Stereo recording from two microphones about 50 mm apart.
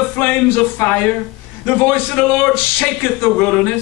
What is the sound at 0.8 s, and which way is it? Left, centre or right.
Speech, left.